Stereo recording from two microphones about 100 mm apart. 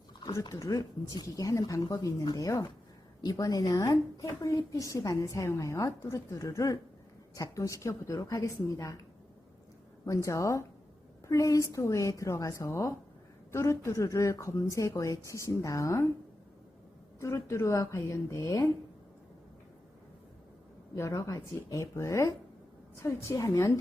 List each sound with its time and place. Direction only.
0.4 s a woman's voice: 35° left (ahead or behind)
10.1 s a woman's voice: 30° left (ahead or behind)
17.2 s a woman's voice: 30° left (ahead or behind)
20.9 s a woman's voice: 30° left (ahead or behind)